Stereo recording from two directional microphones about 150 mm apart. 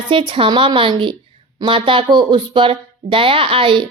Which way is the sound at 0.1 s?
35° right (ahead or behind).